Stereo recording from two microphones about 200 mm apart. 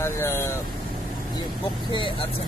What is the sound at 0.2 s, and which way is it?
Speech, 15° left (ahead or behind).